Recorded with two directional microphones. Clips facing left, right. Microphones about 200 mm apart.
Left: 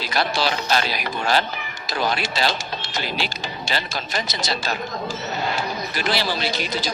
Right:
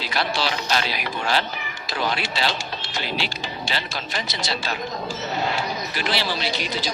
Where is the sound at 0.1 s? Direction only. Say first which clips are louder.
Left 2 dB; 45° left (ahead or behind).